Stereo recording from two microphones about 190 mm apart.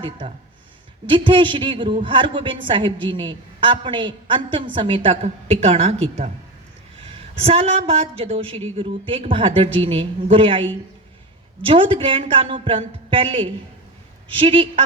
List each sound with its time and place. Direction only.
1.0 s a woman's voice: 25° right (ahead or behind)